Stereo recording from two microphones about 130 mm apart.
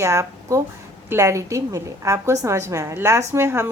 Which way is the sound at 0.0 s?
20° right (ahead or behind).